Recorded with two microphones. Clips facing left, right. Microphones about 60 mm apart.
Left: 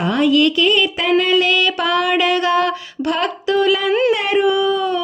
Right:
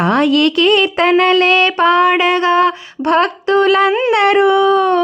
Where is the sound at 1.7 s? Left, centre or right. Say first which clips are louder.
Right 6 dB; right.